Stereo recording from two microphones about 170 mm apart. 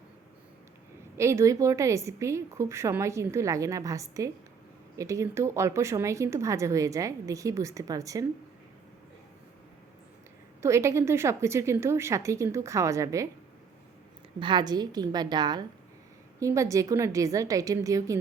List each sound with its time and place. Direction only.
1.1 s speech: 15° right (ahead or behind)
10.6 s speech: 15° right (ahead or behind)
14.3 s a woman's voice: 25° right (ahead or behind)